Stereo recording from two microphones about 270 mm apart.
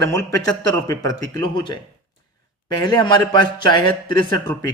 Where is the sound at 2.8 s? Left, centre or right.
Centre.